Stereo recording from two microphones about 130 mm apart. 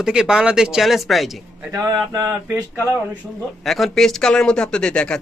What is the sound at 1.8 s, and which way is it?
Mantra, 20° right (ahead or behind).